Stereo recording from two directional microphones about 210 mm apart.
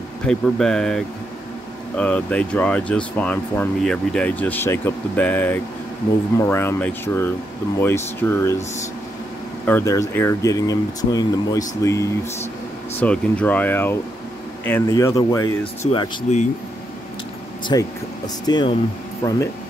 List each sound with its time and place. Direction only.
0.2 s speech: 5° left (ahead or behind)
9.7 s speech: 10° left (ahead or behind); by 16.4 s 30° left (ahead or behind)
17.7 s speech: 20° left (ahead or behind)